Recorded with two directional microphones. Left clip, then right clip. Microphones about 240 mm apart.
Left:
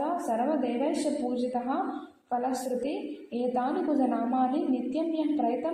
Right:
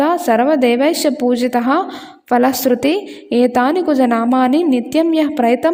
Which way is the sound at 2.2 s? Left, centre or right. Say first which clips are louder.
Right 16 dB; right.